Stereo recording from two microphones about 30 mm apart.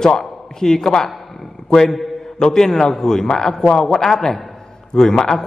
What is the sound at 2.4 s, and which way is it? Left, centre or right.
A man's voice, left.